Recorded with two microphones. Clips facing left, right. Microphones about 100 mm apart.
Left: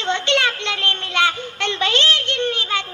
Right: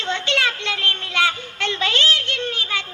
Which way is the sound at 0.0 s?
20° left (ahead or behind).